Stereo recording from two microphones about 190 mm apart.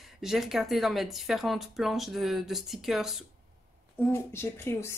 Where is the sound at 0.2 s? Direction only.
Centre (ahead or behind).